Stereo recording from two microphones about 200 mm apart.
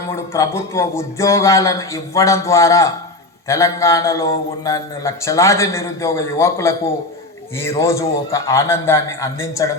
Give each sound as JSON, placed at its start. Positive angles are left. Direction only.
{"t": 0.1, "sound": "a man's voice", "side_deg": 15}